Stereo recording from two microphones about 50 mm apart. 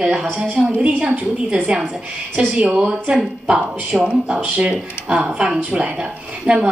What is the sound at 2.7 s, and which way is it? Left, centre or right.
Speech, right.